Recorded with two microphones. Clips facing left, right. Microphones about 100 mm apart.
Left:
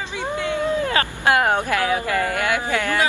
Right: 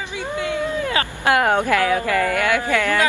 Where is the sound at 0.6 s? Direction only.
20° left (ahead or behind).